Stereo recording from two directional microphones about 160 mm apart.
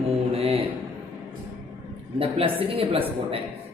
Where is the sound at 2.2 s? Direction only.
35° right (ahead or behind).